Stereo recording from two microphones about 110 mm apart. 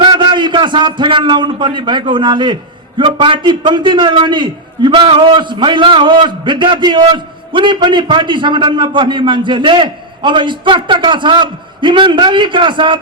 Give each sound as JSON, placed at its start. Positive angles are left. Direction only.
{"t": 0.0, "sound": "a man's voice", "side_deg": -45}